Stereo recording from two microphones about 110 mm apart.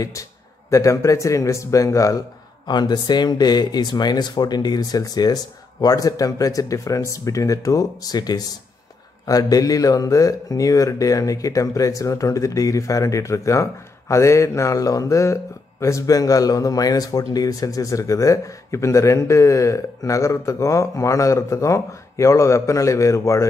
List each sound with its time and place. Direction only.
0.7 s speech: 30° left (ahead or behind)